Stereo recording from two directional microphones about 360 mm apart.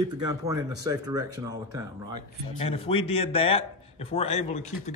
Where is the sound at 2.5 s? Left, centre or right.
Centre.